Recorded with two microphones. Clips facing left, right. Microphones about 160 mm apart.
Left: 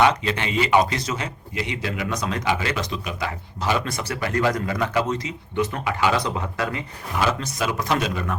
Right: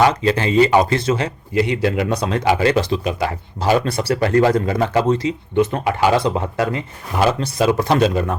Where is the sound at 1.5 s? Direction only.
40° right (ahead or behind).